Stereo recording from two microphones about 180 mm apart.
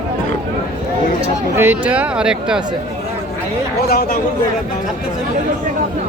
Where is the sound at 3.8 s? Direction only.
55° left (ahead or behind).